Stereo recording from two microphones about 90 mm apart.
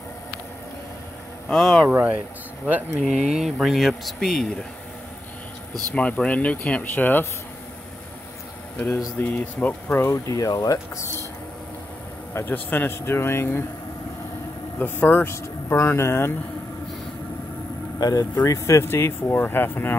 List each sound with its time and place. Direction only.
1.5 s speech: centre (ahead or behind)
1.9 s speech: 15° right (ahead or behind)
3.0 s speech: 5° right (ahead or behind)
5.9 s speech: 15° left (ahead or behind)
9.2 s speech: 15° left (ahead or behind)
10.0 s speech: 35° left (ahead or behind)
12.4 s speech: 20° left (ahead or behind)
14.8 s speech: 20° left (ahead or behind)
18.0 s speech: 45° left (ahead or behind); by 20.0 s 25° left (ahead or behind)